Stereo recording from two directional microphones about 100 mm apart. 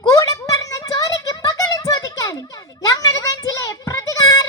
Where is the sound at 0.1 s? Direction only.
35° left (ahead or behind).